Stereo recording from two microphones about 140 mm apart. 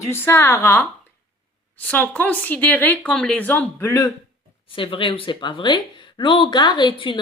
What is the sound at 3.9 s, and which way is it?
Speech, 25° left (ahead or behind).